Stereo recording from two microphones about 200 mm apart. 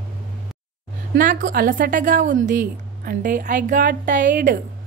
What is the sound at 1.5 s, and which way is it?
A woman's voice, 45° right (ahead or behind).